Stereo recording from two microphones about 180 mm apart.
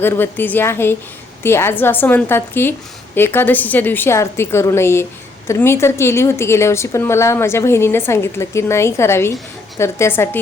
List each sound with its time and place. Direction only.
0.0 s a woman's voice: 10° left (ahead or behind)